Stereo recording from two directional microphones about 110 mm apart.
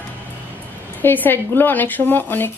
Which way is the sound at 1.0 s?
20° left (ahead or behind).